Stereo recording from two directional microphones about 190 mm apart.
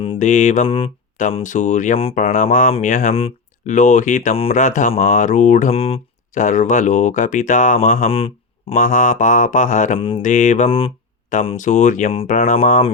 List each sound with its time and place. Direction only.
0.0 s mantra: 35° left (ahead or behind)
1.4 s speech: 40° left (ahead or behind)
11.5 s speech: 40° left (ahead or behind)